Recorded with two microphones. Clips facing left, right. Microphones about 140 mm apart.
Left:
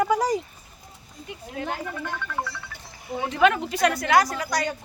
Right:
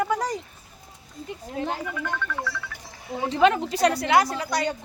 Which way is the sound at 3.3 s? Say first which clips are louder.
Right 1 dB; 30° right (ahead or behind).